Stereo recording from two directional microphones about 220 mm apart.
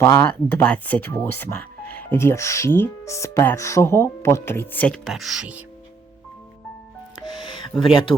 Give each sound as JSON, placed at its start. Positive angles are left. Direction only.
{"t": 0.0, "sound": "speech", "side_deg": 10}
{"t": 7.7, "sound": "speech", "side_deg": 0}